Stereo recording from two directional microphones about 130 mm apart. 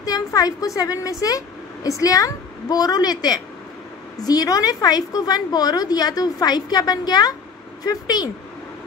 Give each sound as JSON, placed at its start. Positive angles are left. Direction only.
{"t": 0.0, "sound": "a woman's voice", "side_deg": 30}